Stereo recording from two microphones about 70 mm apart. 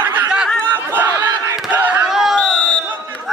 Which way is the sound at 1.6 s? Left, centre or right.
Right.